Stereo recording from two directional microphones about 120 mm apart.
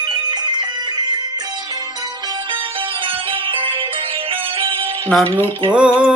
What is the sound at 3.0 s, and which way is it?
Music, 45° right (ahead or behind).